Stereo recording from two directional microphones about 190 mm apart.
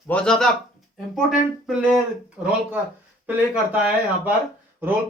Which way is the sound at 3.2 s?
10° right (ahead or behind).